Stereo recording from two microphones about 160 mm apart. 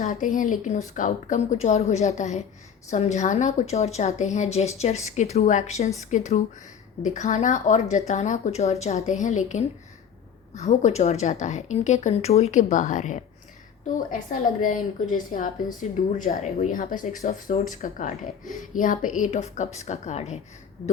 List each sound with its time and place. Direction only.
0.1 s speech: 55° left (ahead or behind)